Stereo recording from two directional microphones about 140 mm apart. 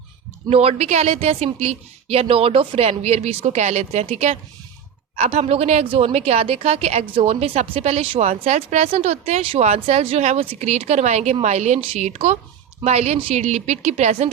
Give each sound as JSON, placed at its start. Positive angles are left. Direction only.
{"t": 0.5, "sound": "speech", "side_deg": -45}